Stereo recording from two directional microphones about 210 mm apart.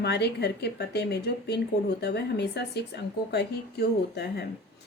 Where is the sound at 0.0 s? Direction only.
50° left (ahead or behind).